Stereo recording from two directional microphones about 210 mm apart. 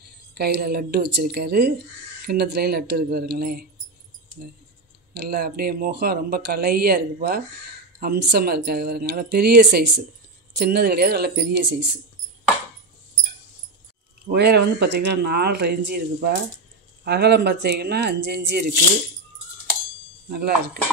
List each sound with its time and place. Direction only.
0.3 s speech: 50° right (ahead or behind)
5.1 s speech: 50° right (ahead or behind)
14.3 s speech: 50° right (ahead or behind)
20.2 s speech: 50° right (ahead or behind)